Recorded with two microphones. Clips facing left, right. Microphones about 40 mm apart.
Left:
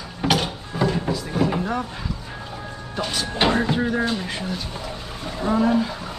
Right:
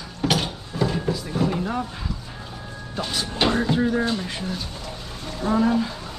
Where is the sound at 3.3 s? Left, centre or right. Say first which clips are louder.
Left 1 dB; centre.